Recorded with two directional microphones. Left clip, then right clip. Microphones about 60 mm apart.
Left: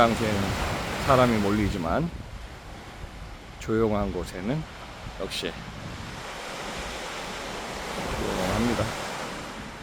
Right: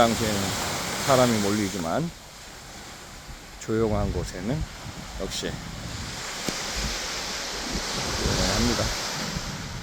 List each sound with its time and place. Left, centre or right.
0.0 s speech: right
3.7 s speech: centre
6.1 s waves: right